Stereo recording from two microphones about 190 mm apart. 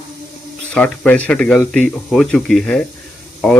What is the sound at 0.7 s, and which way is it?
Speech, 5° left (ahead or behind).